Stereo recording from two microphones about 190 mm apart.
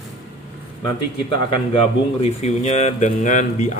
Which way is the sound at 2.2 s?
35° left (ahead or behind).